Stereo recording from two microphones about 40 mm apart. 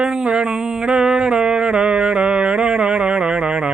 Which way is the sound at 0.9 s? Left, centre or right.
Right.